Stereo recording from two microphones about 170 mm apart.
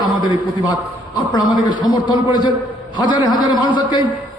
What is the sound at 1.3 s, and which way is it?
A man's voice, 25° left (ahead or behind).